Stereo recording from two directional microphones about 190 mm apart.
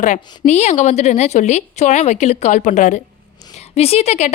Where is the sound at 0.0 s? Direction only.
40° left (ahead or behind).